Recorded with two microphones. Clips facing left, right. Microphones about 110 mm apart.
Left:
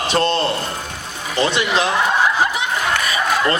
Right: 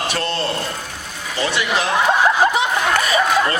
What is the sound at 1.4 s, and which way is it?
Speech, 25° left (ahead or behind).